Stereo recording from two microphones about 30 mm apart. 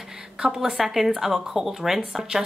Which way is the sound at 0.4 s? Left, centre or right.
Right.